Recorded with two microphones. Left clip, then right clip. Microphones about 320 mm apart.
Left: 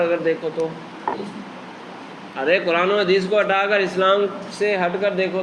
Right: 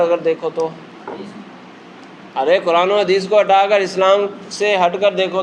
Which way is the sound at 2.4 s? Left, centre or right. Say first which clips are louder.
Right 4 dB; right.